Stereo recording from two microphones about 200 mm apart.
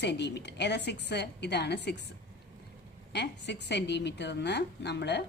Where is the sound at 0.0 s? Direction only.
60° left (ahead or behind).